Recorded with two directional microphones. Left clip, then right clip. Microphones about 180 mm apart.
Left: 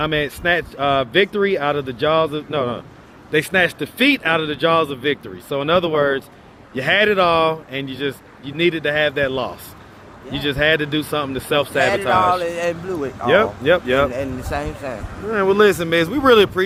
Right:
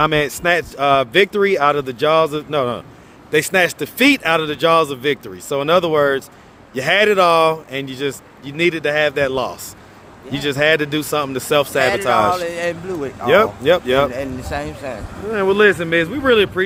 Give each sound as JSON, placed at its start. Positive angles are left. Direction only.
{"t": 0.0, "sound": "a man's voice", "side_deg": -40}
{"t": 12.4, "sound": "speech", "side_deg": -5}
{"t": 13.2, "sound": "a man's voice", "side_deg": -35}
{"t": 14.1, "sound": "speech", "side_deg": -5}
{"t": 15.6, "sound": "a man's voice", "side_deg": 15}